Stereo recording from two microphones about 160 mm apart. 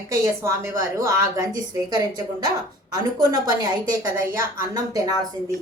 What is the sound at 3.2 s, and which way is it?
Speech, 25° right (ahead or behind).